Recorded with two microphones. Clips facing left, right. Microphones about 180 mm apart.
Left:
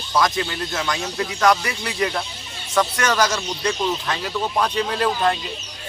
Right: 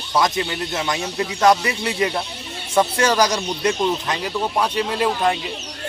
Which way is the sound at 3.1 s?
15° right (ahead or behind).